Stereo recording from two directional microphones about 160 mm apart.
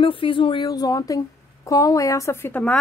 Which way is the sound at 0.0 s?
35° left (ahead or behind).